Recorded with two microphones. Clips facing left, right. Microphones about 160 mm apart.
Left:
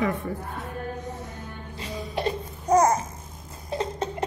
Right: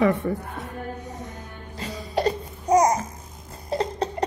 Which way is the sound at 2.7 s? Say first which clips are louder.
Right 1 dB; 15° right (ahead or behind).